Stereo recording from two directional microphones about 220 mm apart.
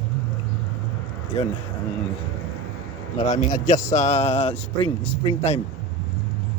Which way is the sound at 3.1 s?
30° left (ahead or behind).